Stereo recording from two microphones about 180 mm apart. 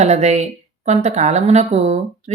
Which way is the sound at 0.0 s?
40° right (ahead or behind).